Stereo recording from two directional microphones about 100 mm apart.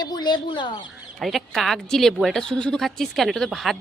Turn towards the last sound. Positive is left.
turn(degrees=0)  # may be behind; listen again after turning